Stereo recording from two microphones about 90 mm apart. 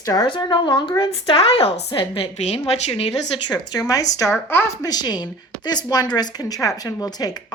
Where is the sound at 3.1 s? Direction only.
50° left (ahead or behind).